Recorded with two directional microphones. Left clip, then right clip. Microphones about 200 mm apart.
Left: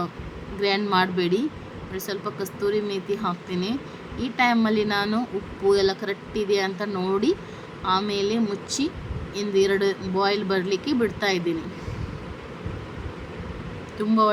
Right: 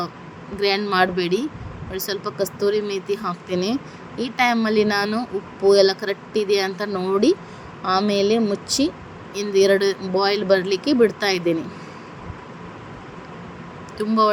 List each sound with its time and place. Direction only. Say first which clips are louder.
0.6 s speech: right 3 dB; 20° right (ahead or behind)
14.0 s speech: right 2 dB; 20° right (ahead or behind)